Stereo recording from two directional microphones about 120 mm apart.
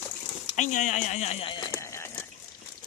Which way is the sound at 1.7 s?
25° left (ahead or behind).